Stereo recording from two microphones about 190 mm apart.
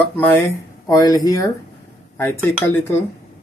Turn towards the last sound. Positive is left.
turn(degrees=10)  # may be behind; listen again after turning